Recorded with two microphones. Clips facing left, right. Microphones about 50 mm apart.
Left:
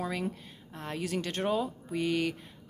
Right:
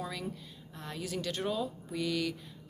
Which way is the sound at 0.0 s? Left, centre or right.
Left.